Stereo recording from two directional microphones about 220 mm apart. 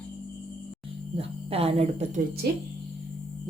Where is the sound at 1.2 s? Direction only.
25° right (ahead or behind).